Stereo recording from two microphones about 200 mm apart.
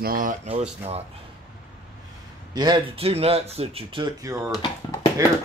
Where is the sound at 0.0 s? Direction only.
45° right (ahead or behind).